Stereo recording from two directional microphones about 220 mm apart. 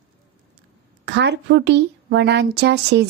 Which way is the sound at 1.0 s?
55° right (ahead or behind).